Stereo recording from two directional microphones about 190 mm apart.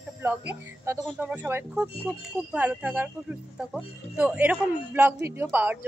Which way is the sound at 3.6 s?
Centre (ahead or behind).